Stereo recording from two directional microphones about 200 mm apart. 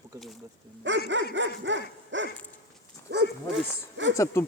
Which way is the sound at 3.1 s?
55° right (ahead or behind).